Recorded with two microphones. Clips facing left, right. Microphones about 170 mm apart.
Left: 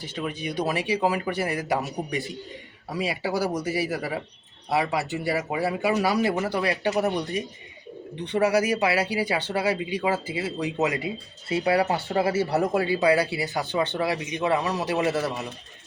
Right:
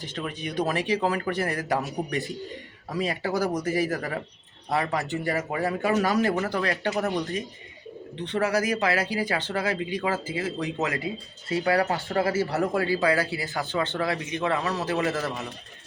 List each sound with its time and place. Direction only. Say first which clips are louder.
0.0 s speech: left 2 dB; 10° left (ahead or behind)